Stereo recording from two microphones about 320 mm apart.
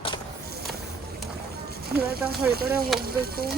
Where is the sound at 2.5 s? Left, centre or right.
Right.